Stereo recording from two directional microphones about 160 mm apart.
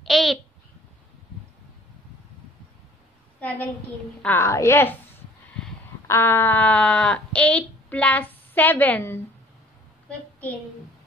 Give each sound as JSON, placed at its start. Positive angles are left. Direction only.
{"t": 0.0, "sound": "a child's voice", "side_deg": 0}
{"t": 3.3, "sound": "a woman's voice", "side_deg": 10}
{"t": 6.0, "sound": "speech", "side_deg": 15}